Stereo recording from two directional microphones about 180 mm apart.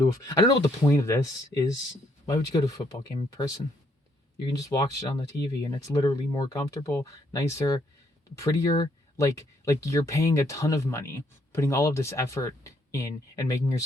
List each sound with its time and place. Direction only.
0.0 s speech: 20° left (ahead or behind)